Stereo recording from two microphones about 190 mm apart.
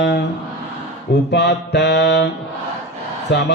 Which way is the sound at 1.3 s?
65° left (ahead or behind).